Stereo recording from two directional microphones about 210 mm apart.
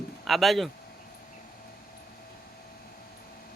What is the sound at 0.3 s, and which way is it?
Speech, centre (ahead or behind).